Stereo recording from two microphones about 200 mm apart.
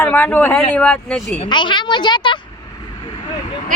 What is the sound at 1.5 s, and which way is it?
Speech, 25° left (ahead or behind).